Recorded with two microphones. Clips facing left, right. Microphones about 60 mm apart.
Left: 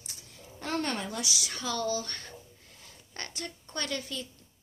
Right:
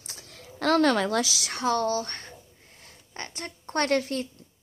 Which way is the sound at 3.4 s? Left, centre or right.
Right.